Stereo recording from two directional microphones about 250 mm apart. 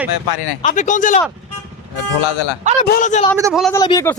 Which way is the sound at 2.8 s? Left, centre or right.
Left.